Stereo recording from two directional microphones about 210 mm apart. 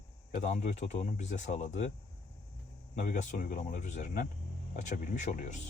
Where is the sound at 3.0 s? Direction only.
40° left (ahead or behind).